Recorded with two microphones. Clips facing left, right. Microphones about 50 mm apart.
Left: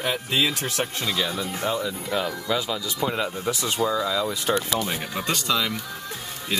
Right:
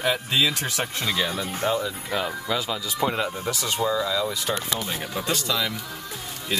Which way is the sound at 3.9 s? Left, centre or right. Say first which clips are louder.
Right 2 dB; centre.